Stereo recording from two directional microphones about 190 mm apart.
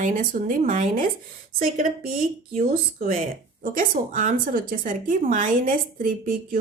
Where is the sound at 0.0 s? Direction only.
45° right (ahead or behind).